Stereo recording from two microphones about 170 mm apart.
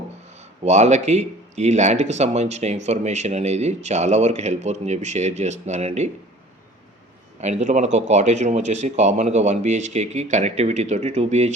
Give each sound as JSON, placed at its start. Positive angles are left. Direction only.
{"t": 0.3, "sound": "speech", "side_deg": -40}
{"t": 7.4, "sound": "speech", "side_deg": -45}